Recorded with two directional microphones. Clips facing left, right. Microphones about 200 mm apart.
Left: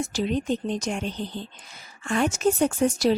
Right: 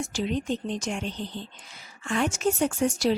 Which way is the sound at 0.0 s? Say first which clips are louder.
Left 3 dB; 40° left (ahead or behind).